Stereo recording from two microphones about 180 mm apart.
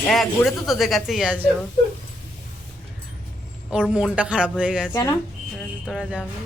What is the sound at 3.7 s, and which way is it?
Speech, 5° right (ahead or behind).